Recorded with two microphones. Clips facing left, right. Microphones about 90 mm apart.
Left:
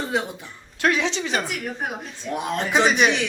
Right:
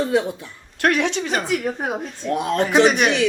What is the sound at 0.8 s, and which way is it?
Speech, 60° right (ahead or behind).